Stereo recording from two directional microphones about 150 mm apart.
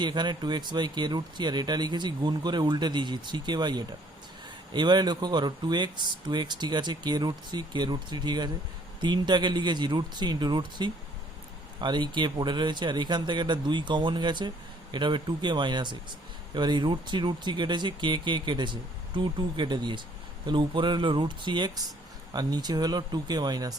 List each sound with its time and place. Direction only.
0.0 s speech: 30° right (ahead or behind)